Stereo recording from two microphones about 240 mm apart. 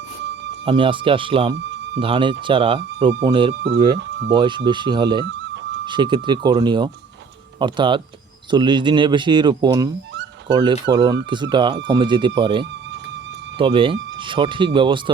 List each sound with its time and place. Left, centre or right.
0.6 s speech: right
3.5 s speech: right
4.3 s speech: centre